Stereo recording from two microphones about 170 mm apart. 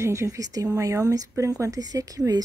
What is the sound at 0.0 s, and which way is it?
Speech, 15° right (ahead or behind).